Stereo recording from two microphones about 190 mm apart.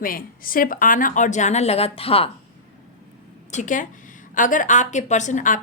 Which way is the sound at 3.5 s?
45° left (ahead or behind).